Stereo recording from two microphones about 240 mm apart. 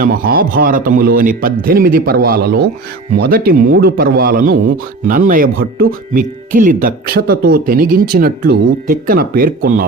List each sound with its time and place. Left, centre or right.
0.0 s a man's voice: right